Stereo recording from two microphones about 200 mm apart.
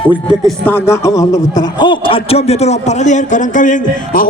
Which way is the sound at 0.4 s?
10° left (ahead or behind).